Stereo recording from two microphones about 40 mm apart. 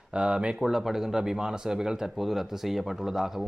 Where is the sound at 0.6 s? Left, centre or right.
Centre.